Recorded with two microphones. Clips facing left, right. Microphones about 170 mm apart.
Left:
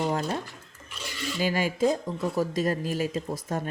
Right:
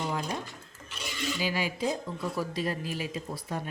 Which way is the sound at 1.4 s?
45° left (ahead or behind).